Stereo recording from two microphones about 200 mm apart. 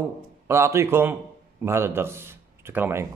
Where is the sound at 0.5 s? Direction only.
15° right (ahead or behind).